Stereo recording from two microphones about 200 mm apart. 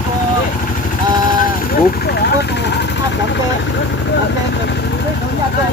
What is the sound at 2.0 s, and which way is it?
Vehicle, 55° left (ahead or behind).